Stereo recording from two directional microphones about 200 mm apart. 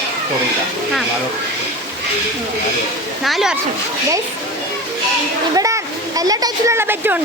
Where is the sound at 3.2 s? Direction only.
Centre (ahead or behind).